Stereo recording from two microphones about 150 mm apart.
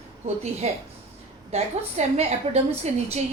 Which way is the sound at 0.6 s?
45° right (ahead or behind).